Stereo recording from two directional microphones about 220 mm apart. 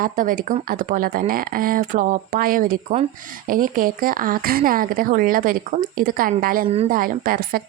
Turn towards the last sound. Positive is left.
turn(degrees=-40)  # may be behind; listen again after turning